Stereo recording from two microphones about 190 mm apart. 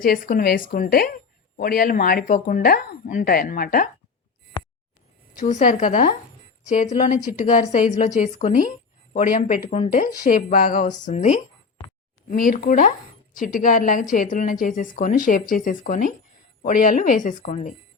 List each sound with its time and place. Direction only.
0.0 s a woman's voice: 50° left (ahead or behind)
5.4 s a woman's voice: 40° left (ahead or behind)